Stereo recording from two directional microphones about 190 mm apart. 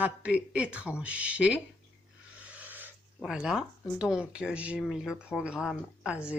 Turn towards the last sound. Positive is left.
turn(degrees=-5)  # may be behind; listen again after turning